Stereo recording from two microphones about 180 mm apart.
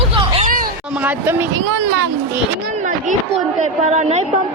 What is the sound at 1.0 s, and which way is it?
Speech, 10° right (ahead or behind).